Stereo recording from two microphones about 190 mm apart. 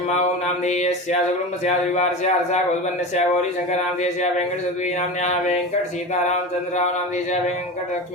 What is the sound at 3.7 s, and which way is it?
Speech, 35° left (ahead or behind).